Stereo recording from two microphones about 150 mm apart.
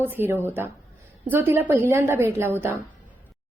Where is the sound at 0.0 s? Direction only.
15° right (ahead or behind).